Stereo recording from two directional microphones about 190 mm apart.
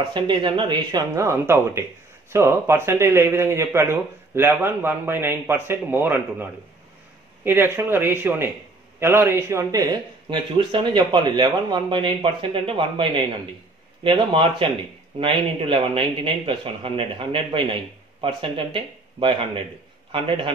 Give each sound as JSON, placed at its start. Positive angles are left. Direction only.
{"t": 0.1, "sound": "a man's voice", "side_deg": -25}